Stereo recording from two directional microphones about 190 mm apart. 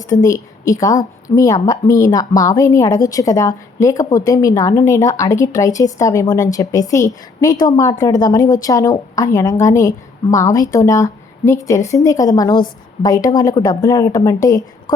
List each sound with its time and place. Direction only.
0.1 s a woman's voice: 15° left (ahead or behind)